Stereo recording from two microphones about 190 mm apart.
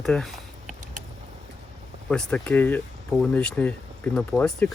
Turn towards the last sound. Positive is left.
turn(degrees=5)  # may be behind; listen again after turning